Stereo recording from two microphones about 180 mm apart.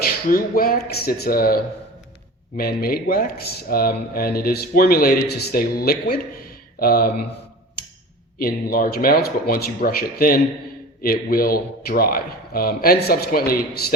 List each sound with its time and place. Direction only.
0.0 s speech: 55° left (ahead or behind)
8.4 s speech: 55° left (ahead or behind)